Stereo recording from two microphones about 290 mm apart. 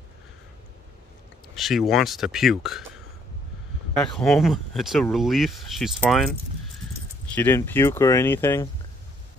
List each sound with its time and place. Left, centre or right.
1.5 s speech: centre
3.9 s speech: centre
7.3 s speech: centre